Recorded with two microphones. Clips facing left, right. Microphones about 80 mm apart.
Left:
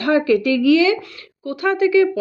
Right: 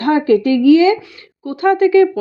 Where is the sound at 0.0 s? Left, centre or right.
Right.